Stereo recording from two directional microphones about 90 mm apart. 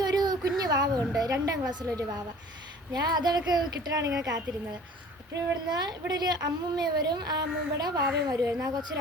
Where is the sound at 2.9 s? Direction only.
50° right (ahead or behind).